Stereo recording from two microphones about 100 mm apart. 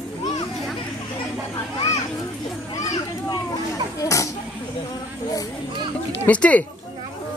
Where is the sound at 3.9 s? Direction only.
35° left (ahead or behind).